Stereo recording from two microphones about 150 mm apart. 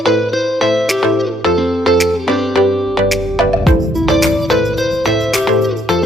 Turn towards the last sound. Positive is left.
turn(degrees=0)  # may be behind; listen again after turning